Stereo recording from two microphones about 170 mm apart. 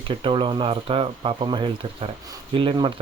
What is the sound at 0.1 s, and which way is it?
Speech, 30° right (ahead or behind).